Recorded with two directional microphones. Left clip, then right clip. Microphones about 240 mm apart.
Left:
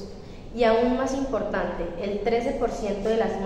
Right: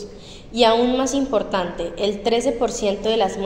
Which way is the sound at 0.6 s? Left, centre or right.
Right.